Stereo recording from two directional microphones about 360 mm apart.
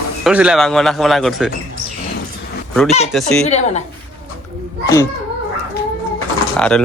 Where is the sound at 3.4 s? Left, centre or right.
Centre.